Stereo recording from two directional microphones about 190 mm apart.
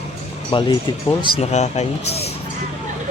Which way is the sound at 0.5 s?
25° left (ahead or behind).